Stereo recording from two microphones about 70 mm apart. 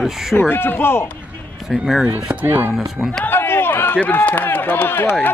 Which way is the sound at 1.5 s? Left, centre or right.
Centre.